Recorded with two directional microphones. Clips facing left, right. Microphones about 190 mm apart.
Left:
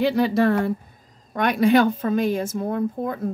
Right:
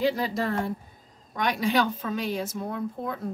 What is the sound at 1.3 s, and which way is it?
A woman's voice, 55° left (ahead or behind).